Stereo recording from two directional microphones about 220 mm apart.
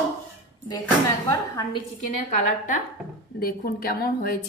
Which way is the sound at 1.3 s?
15° left (ahead or behind).